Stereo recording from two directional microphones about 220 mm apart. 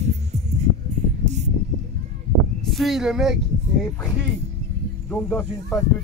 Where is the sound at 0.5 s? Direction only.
30° right (ahead or behind).